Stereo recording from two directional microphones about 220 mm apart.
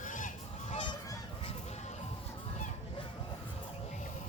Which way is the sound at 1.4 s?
25° left (ahead or behind).